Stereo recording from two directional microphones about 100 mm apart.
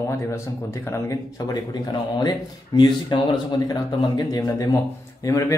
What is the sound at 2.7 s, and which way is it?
Speech, 45° left (ahead or behind).